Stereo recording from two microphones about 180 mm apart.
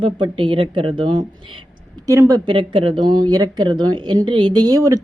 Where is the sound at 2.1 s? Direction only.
20° right (ahead or behind).